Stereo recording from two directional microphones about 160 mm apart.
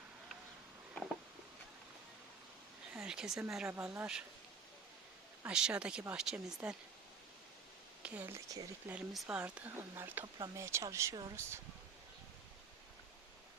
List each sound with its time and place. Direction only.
2.9 s a sound: 5° right (ahead or behind)
3.5 s speech: 5° right (ahead or behind)
5.4 s speech: 5° right (ahead or behind)
8.0 s speech: 10° right (ahead or behind)